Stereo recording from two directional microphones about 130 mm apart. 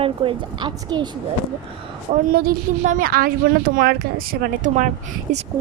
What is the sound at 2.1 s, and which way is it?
Speech, 50° right (ahead or behind).